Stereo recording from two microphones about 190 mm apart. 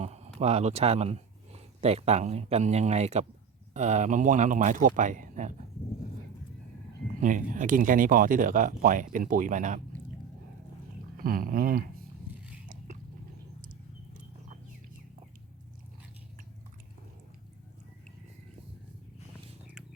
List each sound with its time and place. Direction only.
0.0 s a sound: 35° right (ahead or behind)
0.3 s speech: 35° right (ahead or behind)
7.2 s speech: 45° right (ahead or behind)
11.2 s speech: 50° right (ahead or behind)